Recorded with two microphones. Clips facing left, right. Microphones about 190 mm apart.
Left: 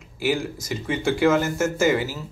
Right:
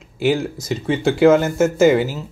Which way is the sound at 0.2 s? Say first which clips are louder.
Right 5 dB; 25° right (ahead or behind).